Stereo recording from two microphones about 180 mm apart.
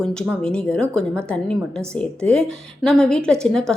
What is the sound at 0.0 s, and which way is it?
A woman's voice, 5° left (ahead or behind).